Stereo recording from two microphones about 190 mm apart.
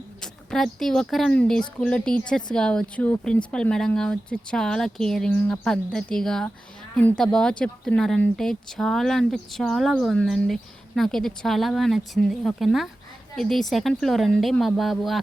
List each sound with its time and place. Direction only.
0.2 s speech: centre (ahead or behind)